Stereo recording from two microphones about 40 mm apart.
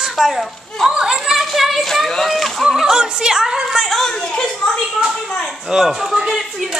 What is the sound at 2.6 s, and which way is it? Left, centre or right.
Speech, centre.